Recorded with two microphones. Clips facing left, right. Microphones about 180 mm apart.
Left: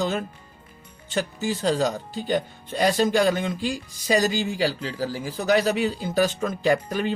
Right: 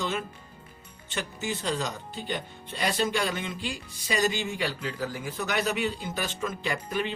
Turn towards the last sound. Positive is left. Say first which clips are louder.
# left 8 dB
turn(degrees=40)  # may be behind; listen again after turning